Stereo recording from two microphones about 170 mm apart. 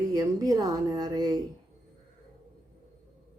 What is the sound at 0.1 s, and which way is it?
Speech, 20° right (ahead or behind).